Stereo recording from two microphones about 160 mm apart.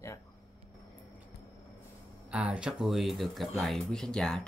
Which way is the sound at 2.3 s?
5° right (ahead or behind).